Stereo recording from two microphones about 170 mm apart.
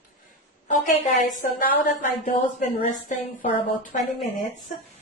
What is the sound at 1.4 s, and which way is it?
A woman's voice, 50° left (ahead or behind).